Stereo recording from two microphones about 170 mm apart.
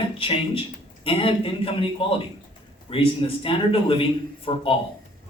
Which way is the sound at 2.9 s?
35° left (ahead or behind).